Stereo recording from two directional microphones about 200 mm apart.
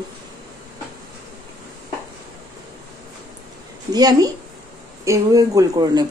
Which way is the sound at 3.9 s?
20° right (ahead or behind).